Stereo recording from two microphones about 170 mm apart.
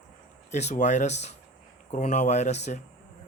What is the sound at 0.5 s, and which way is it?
Speech, 45° left (ahead or behind).